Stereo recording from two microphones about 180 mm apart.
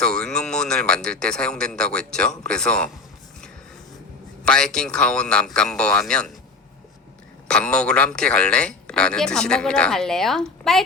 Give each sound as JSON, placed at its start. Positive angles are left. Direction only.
{"t": 0.0, "sound": "a man's voice", "side_deg": 5}
{"t": 4.4, "sound": "a man's voice", "side_deg": 5}
{"t": 7.4, "sound": "a man's voice", "side_deg": 5}